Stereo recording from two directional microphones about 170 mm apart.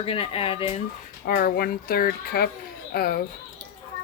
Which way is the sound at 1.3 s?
60° left (ahead or behind).